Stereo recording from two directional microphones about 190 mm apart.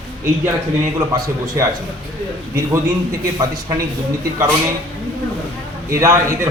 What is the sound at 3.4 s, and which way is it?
Speech, 20° right (ahead or behind).